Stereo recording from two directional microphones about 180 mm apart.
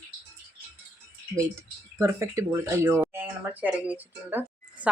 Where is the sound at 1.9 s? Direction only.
15° right (ahead or behind).